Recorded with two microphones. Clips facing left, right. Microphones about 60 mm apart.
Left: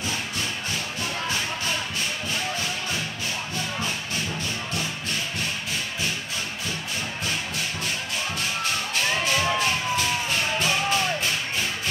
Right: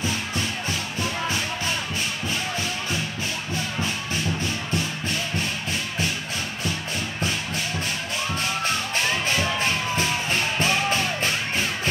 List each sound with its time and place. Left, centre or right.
10.6 s music: right